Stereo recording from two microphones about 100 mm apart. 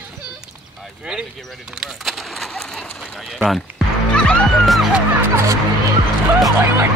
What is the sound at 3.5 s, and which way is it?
Music, centre (ahead or behind).